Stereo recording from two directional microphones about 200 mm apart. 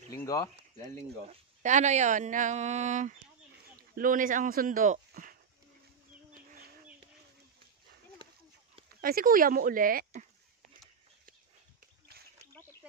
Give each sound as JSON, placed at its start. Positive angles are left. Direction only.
{"t": 0.1, "sound": "a sound", "side_deg": 15}
{"t": 0.9, "sound": "speech", "side_deg": -35}
{"t": 9.0, "sound": "speech", "side_deg": -45}